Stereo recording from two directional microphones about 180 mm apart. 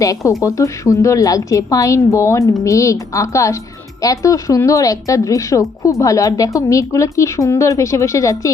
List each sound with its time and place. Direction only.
0.4 s speech: 20° left (ahead or behind)